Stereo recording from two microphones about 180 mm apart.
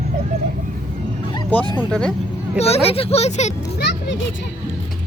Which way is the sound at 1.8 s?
5° left (ahead or behind).